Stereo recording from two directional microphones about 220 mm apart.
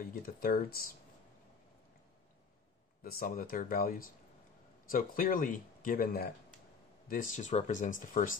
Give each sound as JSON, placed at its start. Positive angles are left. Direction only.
{"t": 0.0, "sound": "speech", "side_deg": 40}
{"t": 3.0, "sound": "speech", "side_deg": 40}